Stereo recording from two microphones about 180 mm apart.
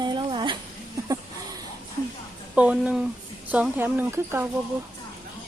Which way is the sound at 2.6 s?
5° right (ahead or behind).